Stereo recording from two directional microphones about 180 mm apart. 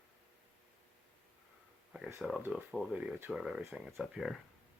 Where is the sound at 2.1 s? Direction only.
Centre (ahead or behind).